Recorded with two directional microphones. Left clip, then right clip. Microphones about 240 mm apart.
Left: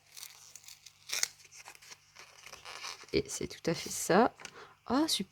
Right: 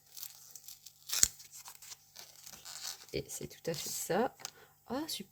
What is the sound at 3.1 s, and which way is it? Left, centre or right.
Speech, left.